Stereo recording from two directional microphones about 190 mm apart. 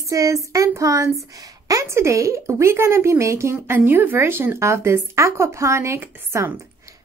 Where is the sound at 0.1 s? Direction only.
15° right (ahead or behind).